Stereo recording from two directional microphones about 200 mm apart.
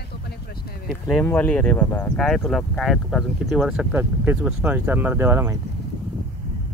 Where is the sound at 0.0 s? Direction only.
50° left (ahead or behind).